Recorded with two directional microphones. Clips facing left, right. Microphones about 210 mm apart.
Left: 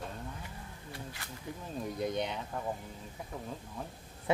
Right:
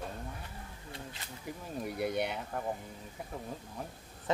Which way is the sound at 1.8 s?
10° right (ahead or behind).